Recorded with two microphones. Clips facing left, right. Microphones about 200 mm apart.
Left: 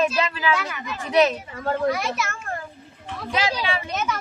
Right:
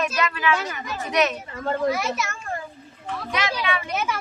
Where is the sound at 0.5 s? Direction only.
40° right (ahead or behind).